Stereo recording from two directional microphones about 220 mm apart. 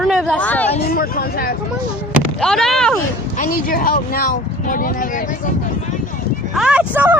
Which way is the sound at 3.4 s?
40° left (ahead or behind).